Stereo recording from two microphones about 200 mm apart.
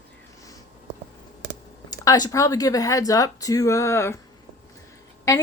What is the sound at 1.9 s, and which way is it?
Speech, 20° left (ahead or behind).